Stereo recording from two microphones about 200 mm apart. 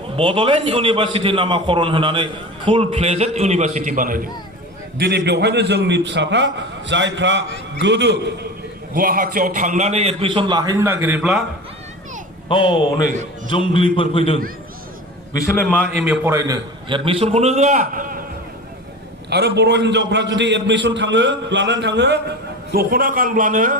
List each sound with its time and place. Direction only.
0.2 s a man's voice: 25° right (ahead or behind); by 4.3 s 45° right (ahead or behind)
4.9 s a man's voice: 55° right (ahead or behind)
9.0 s a man's voice: 45° right (ahead or behind); by 11.4 s 5° right (ahead or behind)
12.5 s a man's voice: 25° left (ahead or behind)
15.4 s a man's voice: 15° left (ahead or behind)
16.0 s a man's voice: 10° right (ahead or behind); by 18.2 s 45° right (ahead or behind)
19.3 s a man's voice: 55° right (ahead or behind)
22.7 s a man's voice: 50° right (ahead or behind)